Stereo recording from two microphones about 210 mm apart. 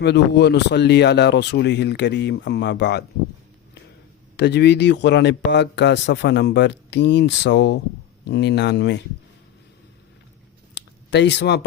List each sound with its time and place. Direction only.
0.0 s a man's voice: 55° left (ahead or behind)
4.4 s a man's voice: 55° left (ahead or behind)
10.8 s a sound: 55° left (ahead or behind)